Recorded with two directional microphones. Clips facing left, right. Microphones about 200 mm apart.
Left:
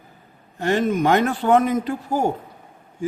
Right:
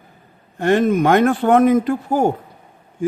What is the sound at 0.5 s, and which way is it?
A man's voice, 55° right (ahead or behind).